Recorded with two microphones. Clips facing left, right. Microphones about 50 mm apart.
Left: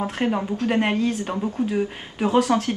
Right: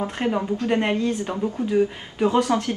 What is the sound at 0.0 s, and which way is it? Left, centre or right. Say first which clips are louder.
Speech: even; centre.